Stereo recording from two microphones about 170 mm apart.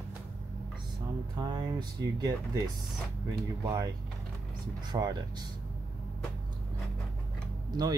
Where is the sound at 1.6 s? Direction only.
25° right (ahead or behind).